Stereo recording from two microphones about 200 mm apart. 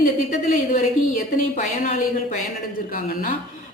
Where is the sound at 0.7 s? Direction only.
35° left (ahead or behind).